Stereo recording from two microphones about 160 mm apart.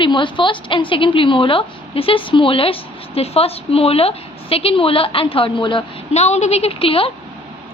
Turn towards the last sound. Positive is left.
turn(degrees=35)  # may be behind; listen again after turning